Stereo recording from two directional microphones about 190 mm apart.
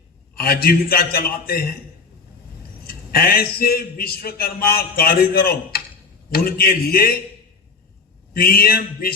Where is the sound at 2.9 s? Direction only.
50° left (ahead or behind).